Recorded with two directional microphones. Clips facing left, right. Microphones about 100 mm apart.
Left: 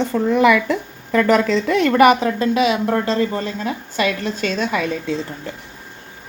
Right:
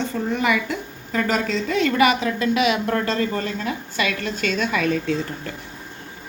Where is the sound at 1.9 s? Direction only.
50° left (ahead or behind).